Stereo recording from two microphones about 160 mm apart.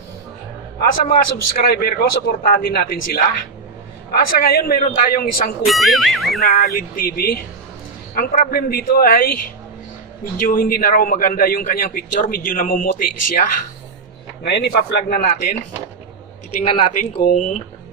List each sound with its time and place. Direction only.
0.7 s a man's voice: 70° left (ahead or behind)
5.7 s speech: centre (ahead or behind)
6.7 s a man's voice: 65° left (ahead or behind)
10.4 s a man's voice: 60° left (ahead or behind)
14.4 s speech: 90° left; by 15.3 s 75° left (ahead or behind)
16.6 s speech: 50° left (ahead or behind)